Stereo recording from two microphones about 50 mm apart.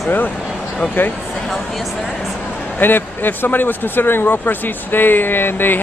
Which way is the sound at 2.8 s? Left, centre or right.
Left.